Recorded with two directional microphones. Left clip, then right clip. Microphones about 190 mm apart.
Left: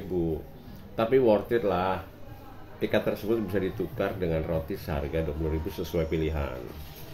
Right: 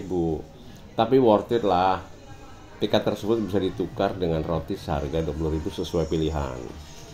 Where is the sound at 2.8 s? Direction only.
20° right (ahead or behind).